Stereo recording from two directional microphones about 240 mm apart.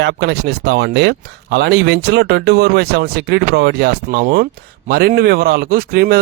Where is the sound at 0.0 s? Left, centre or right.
Right.